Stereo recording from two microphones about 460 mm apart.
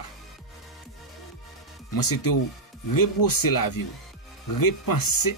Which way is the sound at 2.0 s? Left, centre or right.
Left.